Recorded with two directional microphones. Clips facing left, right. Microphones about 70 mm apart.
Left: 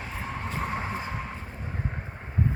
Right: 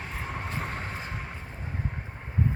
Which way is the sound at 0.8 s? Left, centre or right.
Centre.